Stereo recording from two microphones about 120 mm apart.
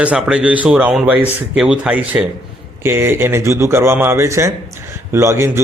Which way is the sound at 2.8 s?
20° right (ahead or behind).